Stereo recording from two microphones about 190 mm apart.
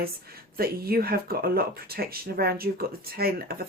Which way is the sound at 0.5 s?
50° right (ahead or behind).